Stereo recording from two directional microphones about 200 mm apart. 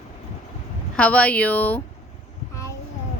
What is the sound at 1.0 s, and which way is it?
Speech, 5° left (ahead or behind).